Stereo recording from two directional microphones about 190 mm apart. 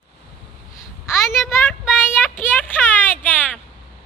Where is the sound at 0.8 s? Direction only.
15° left (ahead or behind).